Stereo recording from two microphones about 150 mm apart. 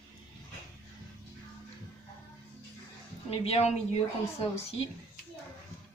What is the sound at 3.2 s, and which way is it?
A woman's voice, 40° left (ahead or behind).